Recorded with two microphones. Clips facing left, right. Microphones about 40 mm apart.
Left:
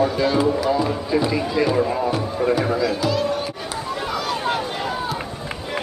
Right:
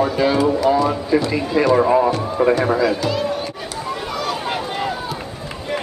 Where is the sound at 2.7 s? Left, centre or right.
Centre.